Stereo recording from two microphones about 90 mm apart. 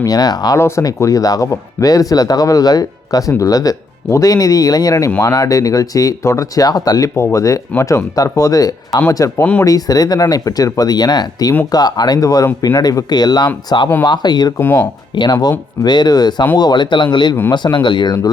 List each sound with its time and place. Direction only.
0.0 s speech: 45° left (ahead or behind)
0.5 s speech: 40° left (ahead or behind)
7.2 s speech: 35° left (ahead or behind)
9.4 s speech: 15° left (ahead or behind)
9.6 s speech: 45° left (ahead or behind)
14.6 s speech: 20° left (ahead or behind)
15.1 s speech: 55° left (ahead or behind)